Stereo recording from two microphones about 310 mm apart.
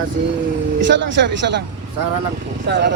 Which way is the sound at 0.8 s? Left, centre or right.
Right.